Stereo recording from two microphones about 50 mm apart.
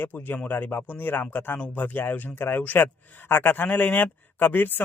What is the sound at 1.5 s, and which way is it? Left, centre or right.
Speech, left.